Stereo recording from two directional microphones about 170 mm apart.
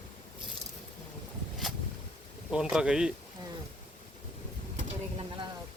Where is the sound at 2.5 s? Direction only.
5° right (ahead or behind).